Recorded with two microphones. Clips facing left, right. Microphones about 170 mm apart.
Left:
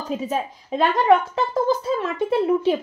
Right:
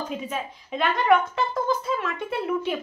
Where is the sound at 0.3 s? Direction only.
35° left (ahead or behind).